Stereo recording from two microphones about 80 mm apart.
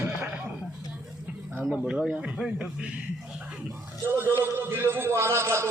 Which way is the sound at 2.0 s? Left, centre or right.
Centre.